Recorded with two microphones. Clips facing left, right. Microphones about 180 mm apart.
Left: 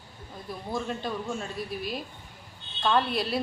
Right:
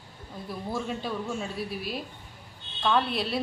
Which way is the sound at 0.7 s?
5° right (ahead or behind).